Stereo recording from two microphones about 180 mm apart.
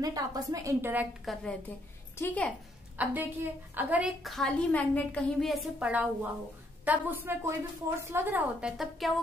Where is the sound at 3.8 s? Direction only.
5° right (ahead or behind).